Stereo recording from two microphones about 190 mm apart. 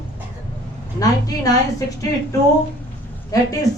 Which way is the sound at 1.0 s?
20° left (ahead or behind).